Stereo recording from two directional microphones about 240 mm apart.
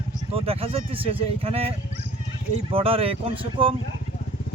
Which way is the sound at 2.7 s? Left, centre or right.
Right.